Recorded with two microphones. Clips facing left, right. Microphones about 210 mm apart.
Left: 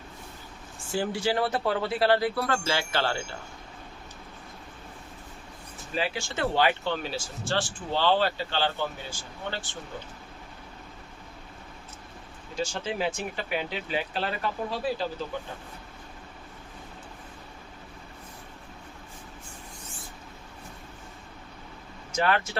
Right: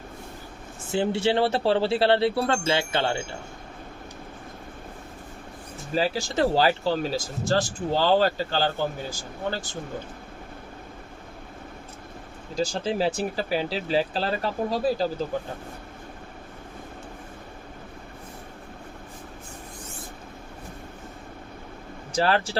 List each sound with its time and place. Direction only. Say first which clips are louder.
0.9 s speech: right 4 dB; 25° right (ahead or behind)
5.9 s speech: right 5 dB; 40° right (ahead or behind)
12.5 s speech: right 5 dB; 35° right (ahead or behind)
22.1 s speech: right 3 dB; 30° right (ahead or behind)